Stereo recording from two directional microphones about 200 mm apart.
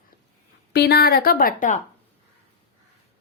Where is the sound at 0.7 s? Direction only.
55° left (ahead or behind).